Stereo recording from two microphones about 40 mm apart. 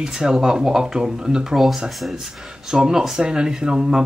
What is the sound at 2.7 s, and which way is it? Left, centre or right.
Speech, right.